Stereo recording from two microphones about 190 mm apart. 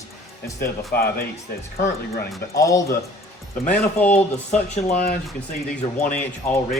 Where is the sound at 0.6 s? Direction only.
55° left (ahead or behind).